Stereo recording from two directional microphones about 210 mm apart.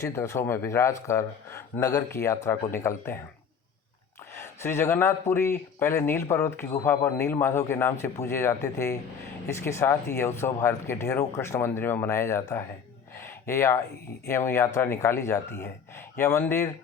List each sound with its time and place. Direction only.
0.0 s speech: 15° left (ahead or behind)
4.4 s speech: 10° left (ahead or behind)
13.2 s a sound: 15° left (ahead or behind)
14.3 s speech: 15° left (ahead or behind)